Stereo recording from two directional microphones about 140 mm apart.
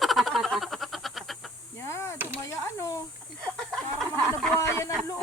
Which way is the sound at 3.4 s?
5° left (ahead or behind).